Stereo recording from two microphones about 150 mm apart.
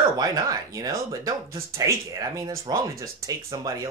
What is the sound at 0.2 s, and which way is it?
Speech, 25° right (ahead or behind).